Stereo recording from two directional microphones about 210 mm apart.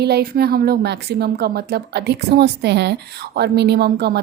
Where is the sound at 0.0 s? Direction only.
50° right (ahead or behind).